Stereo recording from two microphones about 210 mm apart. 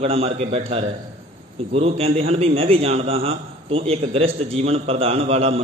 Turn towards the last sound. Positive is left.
turn(degrees=-30)  # may be behind; listen again after turning